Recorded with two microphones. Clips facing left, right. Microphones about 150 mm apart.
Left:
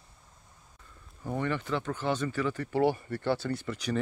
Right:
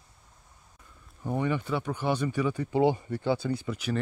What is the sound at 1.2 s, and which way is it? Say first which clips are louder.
Speech: right 3 dB; 15° right (ahead or behind).